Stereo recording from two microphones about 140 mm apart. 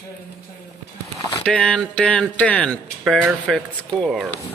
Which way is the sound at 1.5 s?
5° left (ahead or behind).